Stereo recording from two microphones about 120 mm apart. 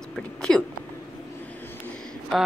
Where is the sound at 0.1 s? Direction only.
5° left (ahead or behind).